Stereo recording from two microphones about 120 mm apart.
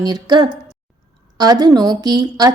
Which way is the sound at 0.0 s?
35° right (ahead or behind).